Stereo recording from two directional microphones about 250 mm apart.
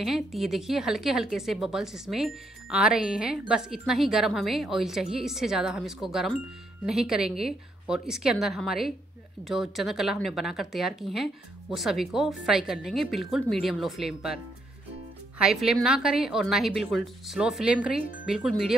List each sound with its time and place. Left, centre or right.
0.0 s a woman's voice: centre